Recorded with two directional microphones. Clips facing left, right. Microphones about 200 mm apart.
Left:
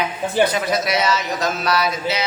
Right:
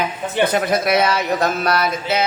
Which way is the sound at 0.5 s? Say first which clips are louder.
Right 3 dB; 55° right (ahead or behind).